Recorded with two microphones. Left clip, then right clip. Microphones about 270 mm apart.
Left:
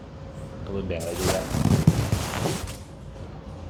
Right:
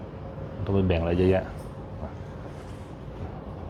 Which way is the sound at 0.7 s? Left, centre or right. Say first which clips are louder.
Right 6 dB; right.